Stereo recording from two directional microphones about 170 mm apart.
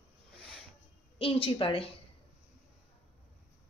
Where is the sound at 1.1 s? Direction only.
30° left (ahead or behind).